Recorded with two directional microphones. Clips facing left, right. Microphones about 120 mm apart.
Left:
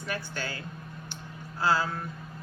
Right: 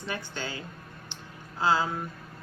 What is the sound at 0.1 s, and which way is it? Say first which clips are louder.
Music: even; 20° right (ahead or behind).